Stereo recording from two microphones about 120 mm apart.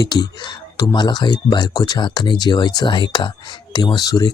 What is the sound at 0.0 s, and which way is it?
Speech, 35° left (ahead or behind).